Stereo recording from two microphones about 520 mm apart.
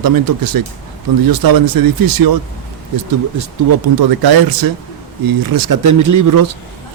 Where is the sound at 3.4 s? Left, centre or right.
Right.